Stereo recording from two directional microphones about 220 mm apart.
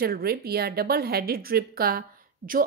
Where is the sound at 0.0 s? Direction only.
45° right (ahead or behind).